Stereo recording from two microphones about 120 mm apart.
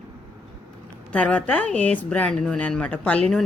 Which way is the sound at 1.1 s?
10° left (ahead or behind).